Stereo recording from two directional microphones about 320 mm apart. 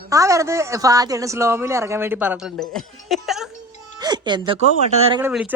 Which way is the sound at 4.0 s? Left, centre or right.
Centre.